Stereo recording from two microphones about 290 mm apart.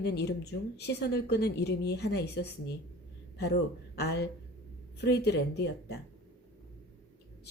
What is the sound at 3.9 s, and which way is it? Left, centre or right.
Speech, left.